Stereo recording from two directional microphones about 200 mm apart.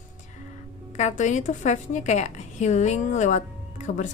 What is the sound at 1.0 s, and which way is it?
A woman's voice, 35° left (ahead or behind).